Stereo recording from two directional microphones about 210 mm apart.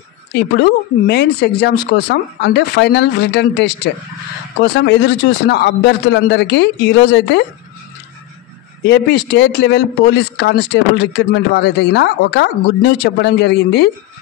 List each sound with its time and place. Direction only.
0.3 s a man's voice: 50° left (ahead or behind)
8.8 s a man's voice: 55° left (ahead or behind)